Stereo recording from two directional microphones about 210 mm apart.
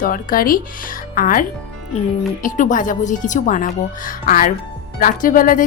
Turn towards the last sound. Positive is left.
turn(degrees=40)  # may be behind; listen again after turning